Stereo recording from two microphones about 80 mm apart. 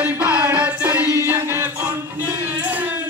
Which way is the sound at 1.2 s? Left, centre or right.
Right.